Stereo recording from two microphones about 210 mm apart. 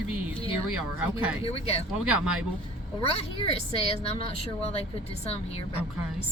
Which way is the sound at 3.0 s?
30° left (ahead or behind).